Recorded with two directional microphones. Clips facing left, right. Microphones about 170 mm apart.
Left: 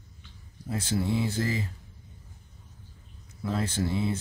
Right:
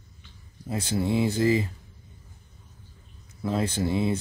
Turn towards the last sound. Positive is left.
turn(degrees=-15)  # may be behind; listen again after turning